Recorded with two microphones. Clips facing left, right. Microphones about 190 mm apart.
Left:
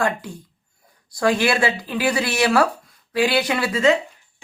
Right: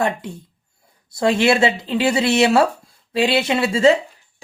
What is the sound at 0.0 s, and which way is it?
Speech, 25° right (ahead or behind).